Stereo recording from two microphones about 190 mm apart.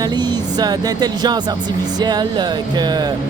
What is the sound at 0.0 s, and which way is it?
Speech, 20° right (ahead or behind).